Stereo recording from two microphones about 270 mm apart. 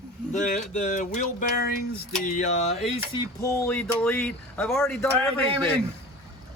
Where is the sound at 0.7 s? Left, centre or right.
Left.